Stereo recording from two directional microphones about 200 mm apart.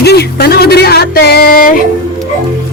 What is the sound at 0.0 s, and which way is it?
Music, 55° left (ahead or behind).